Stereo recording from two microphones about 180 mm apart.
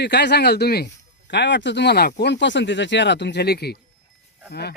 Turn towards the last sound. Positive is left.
turn(degrees=65)  # may be behind; listen again after turning